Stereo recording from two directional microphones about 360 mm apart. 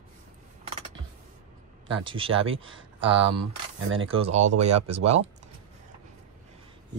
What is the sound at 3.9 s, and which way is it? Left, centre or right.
Speech, centre.